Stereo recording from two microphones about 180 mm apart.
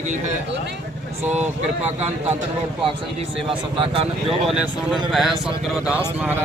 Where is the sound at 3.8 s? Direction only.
30° right (ahead or behind).